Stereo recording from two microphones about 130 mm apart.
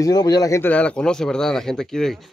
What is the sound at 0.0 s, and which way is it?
Speech, 30° left (ahead or behind).